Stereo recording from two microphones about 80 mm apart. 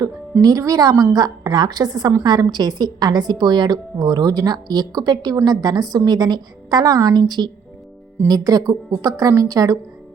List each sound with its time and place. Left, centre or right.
0.4 s a woman's voice: right
8.3 s a woman's voice: right